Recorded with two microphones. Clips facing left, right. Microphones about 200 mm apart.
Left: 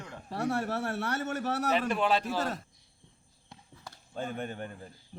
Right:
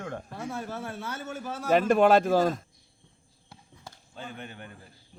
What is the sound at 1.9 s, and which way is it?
Speech, 45° right (ahead or behind).